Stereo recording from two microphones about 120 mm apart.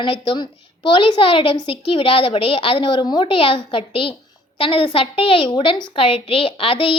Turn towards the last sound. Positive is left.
turn(degrees=50)  # may be behind; listen again after turning